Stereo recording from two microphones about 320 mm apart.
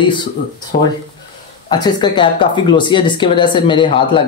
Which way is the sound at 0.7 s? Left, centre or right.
Left.